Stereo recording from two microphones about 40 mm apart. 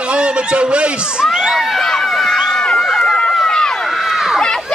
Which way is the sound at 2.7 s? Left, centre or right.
Centre.